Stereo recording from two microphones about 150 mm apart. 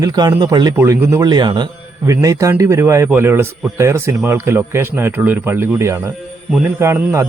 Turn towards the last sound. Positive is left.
turn(degrees=-20)  # may be behind; listen again after turning